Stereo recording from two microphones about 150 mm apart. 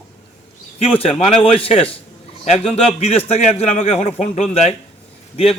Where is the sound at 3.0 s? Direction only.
45° left (ahead or behind).